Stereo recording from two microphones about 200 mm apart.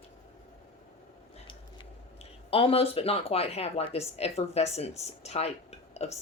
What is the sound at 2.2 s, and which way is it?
Speech, 30° left (ahead or behind).